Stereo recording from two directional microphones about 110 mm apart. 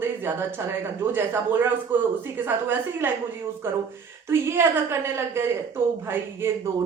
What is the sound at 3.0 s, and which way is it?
Speech, 20° right (ahead or behind).